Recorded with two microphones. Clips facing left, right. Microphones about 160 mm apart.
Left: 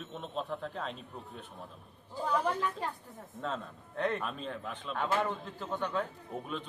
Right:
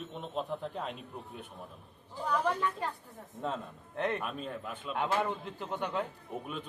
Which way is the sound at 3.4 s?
15° right (ahead or behind).